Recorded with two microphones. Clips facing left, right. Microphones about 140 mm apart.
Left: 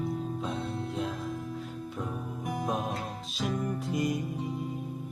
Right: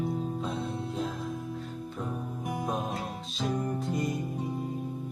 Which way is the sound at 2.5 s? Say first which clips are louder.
Left 1 dB; centre (ahead or behind).